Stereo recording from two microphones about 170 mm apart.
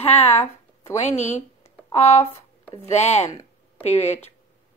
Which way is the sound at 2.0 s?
40° left (ahead or behind).